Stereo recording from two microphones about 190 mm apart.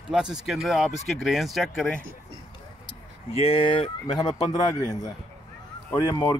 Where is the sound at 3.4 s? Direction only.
30° left (ahead or behind).